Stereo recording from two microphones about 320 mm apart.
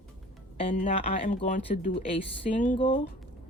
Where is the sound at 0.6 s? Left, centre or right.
Centre.